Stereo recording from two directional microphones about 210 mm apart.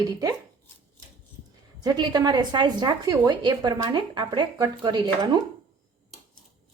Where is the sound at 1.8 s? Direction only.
20° right (ahead or behind).